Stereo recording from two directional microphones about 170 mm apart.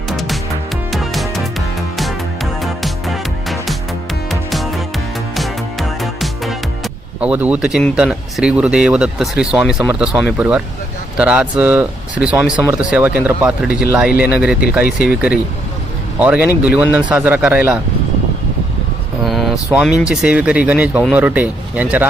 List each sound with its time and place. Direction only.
0.9 s music: centre (ahead or behind)
6.0 s music: centre (ahead or behind)
7.2 s speech: 10° right (ahead or behind)
19.2 s speech: centre (ahead or behind)